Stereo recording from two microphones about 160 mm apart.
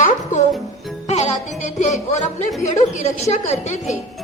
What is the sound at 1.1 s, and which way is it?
Music, 40° left (ahead or behind).